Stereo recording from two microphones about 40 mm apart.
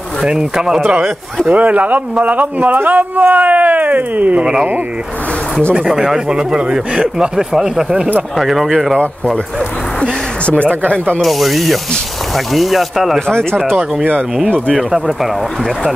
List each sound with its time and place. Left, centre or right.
0.2 s speech: centre
1.5 s speech: right
5.9 s speech: centre
8.4 s speech: centre
8.9 s speech: left
10.4 s speech: left
11.1 s speech: centre
13.3 s speech: centre